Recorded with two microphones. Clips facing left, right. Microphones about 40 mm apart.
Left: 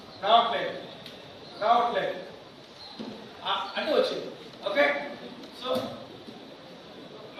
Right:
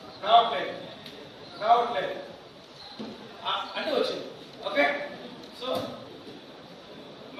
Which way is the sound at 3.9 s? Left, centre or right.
Left.